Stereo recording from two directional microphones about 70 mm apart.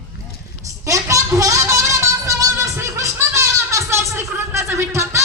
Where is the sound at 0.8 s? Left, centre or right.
Right.